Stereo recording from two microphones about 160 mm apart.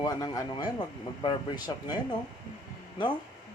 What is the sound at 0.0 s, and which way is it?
Speech, 25° left (ahead or behind).